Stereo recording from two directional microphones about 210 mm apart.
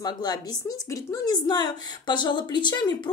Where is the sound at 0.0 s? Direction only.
20° left (ahead or behind).